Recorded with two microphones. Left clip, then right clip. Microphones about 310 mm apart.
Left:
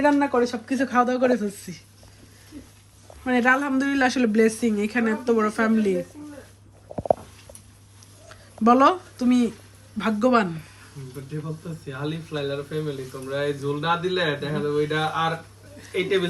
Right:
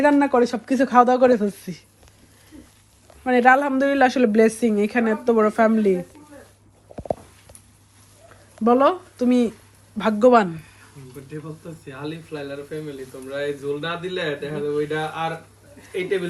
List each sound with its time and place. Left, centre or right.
0.3 s speech: centre
3.2 s speech: centre
8.6 s speech: centre
11.9 s speech: centre